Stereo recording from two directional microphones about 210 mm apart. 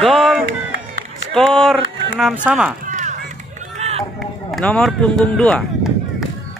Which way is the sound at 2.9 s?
35° right (ahead or behind).